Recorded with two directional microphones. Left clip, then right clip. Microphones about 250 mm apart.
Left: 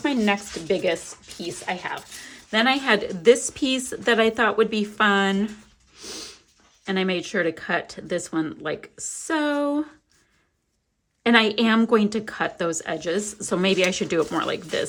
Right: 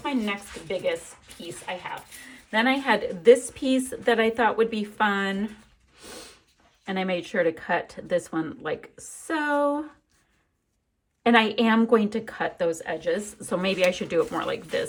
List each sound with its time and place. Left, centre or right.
0.0 s speech: left
2.5 s a woman's voice: centre
6.8 s speech: centre
11.2 s a woman's voice: centre